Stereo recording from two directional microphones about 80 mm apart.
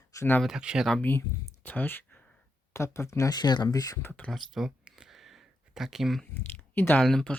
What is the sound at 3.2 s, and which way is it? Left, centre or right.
Speech, left.